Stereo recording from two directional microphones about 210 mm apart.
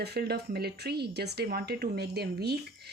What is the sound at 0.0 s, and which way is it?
Speech, 50° right (ahead or behind).